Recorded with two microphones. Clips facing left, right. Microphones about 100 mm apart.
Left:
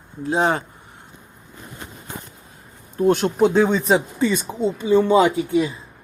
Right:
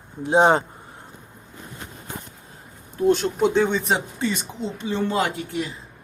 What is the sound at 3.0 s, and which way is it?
Speech, 55° left (ahead or behind).